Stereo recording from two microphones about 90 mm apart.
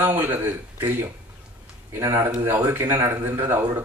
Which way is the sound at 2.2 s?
25° right (ahead or behind).